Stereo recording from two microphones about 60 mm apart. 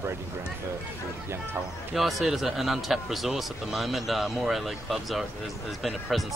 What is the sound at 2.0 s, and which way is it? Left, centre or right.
Speech, centre.